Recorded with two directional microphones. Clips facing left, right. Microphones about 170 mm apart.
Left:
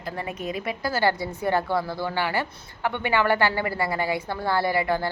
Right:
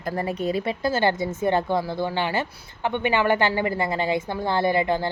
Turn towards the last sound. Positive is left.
turn(degrees=-20)  # may be behind; listen again after turning